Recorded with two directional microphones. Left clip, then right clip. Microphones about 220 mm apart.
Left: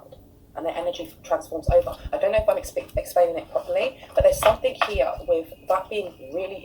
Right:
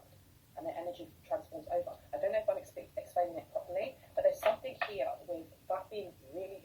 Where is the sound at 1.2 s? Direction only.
35° left (ahead or behind).